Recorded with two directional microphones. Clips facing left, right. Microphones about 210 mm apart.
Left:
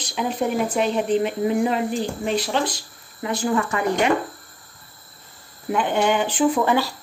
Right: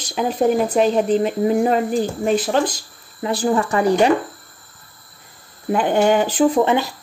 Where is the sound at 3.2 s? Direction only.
35° right (ahead or behind).